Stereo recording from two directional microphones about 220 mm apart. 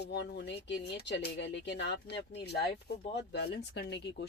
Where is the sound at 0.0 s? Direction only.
50° left (ahead or behind).